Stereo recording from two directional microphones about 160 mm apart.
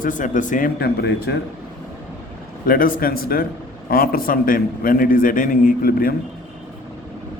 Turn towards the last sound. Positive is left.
turn(degrees=65)  # may be behind; listen again after turning